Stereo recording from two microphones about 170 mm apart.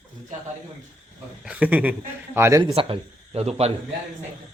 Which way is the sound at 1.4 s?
10° right (ahead or behind).